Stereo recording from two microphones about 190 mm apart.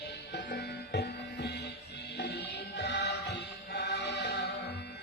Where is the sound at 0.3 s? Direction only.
60° left (ahead or behind).